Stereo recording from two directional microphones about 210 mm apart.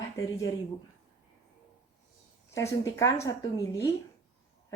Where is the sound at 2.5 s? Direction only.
15° left (ahead or behind).